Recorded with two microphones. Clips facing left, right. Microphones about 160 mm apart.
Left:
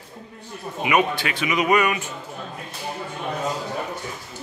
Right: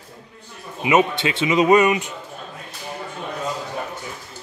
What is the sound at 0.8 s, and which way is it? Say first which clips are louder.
Speech: right 3 dB; 25° right (ahead or behind).